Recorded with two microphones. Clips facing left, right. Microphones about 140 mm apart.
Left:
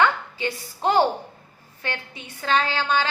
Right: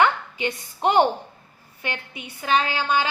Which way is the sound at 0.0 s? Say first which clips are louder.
Right 1 dB; 20° right (ahead or behind).